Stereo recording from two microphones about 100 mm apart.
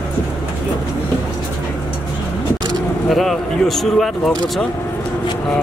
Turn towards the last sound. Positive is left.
turn(degrees=5)  # may be behind; listen again after turning